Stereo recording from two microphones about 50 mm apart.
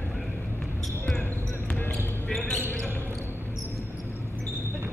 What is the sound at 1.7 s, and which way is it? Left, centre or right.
Basketball bounce, centre.